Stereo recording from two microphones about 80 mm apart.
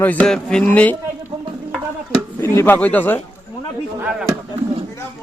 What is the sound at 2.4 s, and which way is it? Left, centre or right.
Speech, left.